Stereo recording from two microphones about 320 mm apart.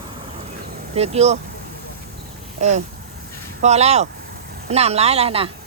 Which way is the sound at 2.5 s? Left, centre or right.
Right.